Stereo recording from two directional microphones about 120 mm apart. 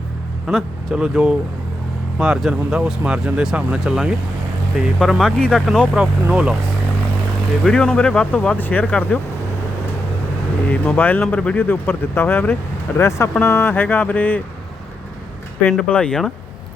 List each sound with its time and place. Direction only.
0.4 s speech: 5° right (ahead or behind)
6.2 s speech: 10° right (ahead or behind)
7.6 s speech: 5° left (ahead or behind)
10.7 s speech: 15° left (ahead or behind)
15.9 s speech: 10° left (ahead or behind)